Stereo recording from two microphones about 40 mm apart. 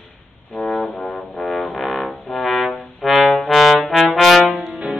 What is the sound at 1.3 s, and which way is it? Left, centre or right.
Music, centre.